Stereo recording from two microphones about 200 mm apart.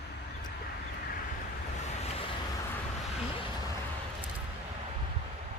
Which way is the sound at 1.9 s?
30° left (ahead or behind).